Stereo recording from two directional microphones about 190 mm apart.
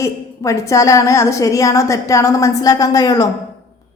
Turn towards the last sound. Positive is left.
turn(degrees=20)  # may be behind; listen again after turning